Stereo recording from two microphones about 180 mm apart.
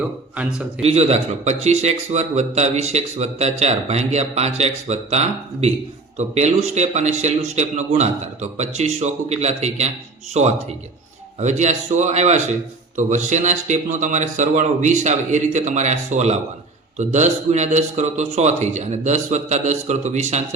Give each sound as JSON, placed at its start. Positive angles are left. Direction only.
{"t": 0.8, "sound": "speech", "side_deg": -35}